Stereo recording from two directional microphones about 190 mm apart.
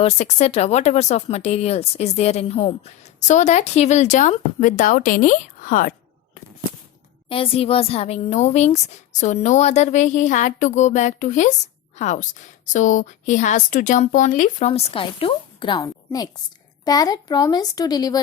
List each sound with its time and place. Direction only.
0.0 s a woman's voice: 35° left (ahead or behind)
7.3 s a woman's voice: 30° left (ahead or behind)
14.7 s a woman's voice: 30° left (ahead or behind)